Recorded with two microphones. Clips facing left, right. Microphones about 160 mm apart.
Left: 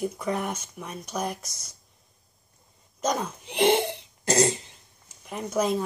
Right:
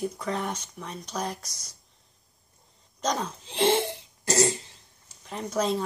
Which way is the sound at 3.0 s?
10° left (ahead or behind).